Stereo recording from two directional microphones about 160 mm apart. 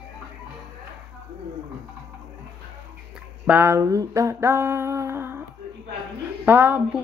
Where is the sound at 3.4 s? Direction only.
15° right (ahead or behind).